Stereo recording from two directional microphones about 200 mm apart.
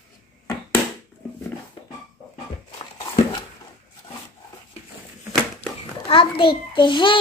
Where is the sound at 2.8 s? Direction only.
25° left (ahead or behind).